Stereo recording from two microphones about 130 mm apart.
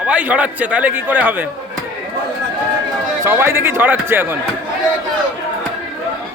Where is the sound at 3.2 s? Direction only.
20° right (ahead or behind).